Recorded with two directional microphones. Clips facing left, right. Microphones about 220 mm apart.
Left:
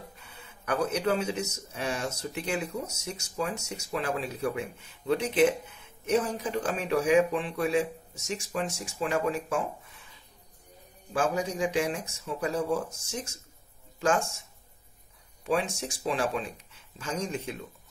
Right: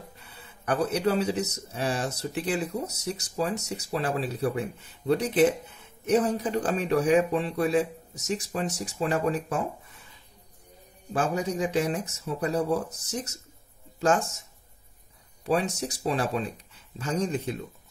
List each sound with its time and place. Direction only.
0.3 s speech: 35° right (ahead or behind)
11.1 s speech: 35° right (ahead or behind)
15.4 s speech: 40° right (ahead or behind)